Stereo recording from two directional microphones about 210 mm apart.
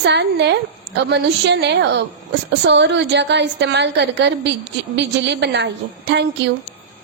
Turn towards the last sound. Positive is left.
turn(degrees=-55)  # may be behind; listen again after turning